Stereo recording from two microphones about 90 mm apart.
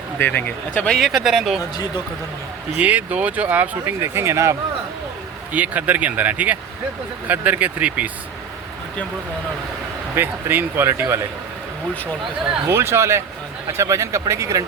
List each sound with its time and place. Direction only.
0.2 s speech: 20° left (ahead or behind)
0.9 s speech: centre (ahead or behind)
2.7 s speech: 15° right (ahead or behind)
4.0 s speech: 30° right (ahead or behind)
5.5 s speech: 15° right (ahead or behind)
10.2 s speech: 25° right (ahead or behind)
12.6 s speech: 30° right (ahead or behind)